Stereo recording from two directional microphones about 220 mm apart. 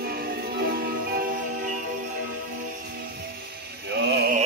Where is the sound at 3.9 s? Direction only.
50° right (ahead or behind).